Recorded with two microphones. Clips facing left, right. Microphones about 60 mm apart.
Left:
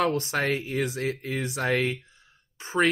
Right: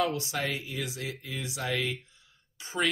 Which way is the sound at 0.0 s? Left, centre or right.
Left.